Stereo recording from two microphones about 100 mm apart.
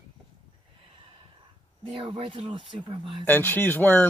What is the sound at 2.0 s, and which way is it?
Speech, 55° right (ahead or behind).